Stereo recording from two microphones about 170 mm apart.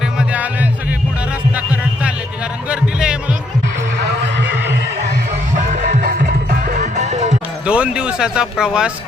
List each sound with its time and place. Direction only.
0.2 s music: 10° right (ahead or behind)
4.2 s a sound: 90° right
5.5 s music: 45° right (ahead or behind)
6.9 s music: 45° right (ahead or behind)
7.6 s speech: 5° right (ahead or behind)